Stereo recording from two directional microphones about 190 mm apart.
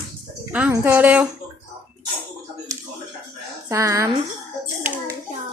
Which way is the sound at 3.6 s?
15° right (ahead or behind).